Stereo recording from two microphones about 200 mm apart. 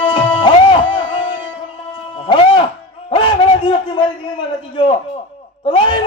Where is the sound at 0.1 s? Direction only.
20° left (ahead or behind).